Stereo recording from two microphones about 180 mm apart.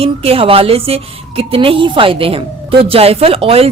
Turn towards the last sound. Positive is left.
turn(degrees=-30)  # may be behind; listen again after turning